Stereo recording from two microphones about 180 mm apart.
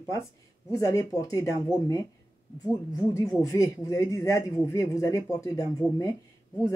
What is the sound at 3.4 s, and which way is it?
Speech, 20° left (ahead or behind).